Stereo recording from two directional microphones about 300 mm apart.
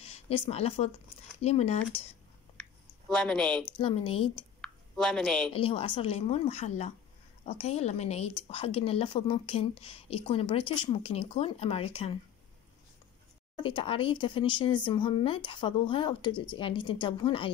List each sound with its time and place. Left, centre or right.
0.0 s a sound: centre
0.5 s speech: centre
3.1 s speech: centre
3.7 s speech: centre
4.6 s a sound: centre
5.5 s speech: centre
13.6 s speech: centre